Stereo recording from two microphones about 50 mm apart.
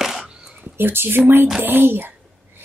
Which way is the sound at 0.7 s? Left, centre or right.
Right.